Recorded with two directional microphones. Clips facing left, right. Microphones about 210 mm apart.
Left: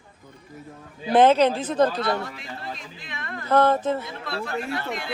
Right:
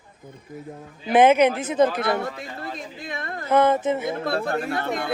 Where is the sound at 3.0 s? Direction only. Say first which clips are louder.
Right 3 dB; 40° right (ahead or behind).